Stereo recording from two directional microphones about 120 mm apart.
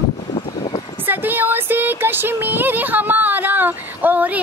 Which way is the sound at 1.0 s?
15° right (ahead or behind).